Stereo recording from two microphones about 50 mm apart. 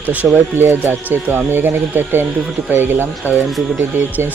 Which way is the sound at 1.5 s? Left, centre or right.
Right.